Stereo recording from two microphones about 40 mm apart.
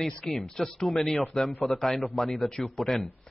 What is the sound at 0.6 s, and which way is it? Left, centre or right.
Speech, centre.